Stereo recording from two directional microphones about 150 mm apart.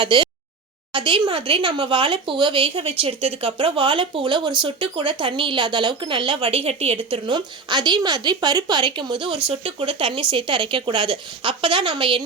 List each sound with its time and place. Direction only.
0.0 s speech: 30° right (ahead or behind)